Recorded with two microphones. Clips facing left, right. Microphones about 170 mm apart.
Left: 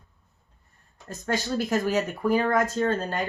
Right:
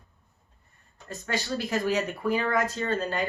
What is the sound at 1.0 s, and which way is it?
Speech, 45° left (ahead or behind).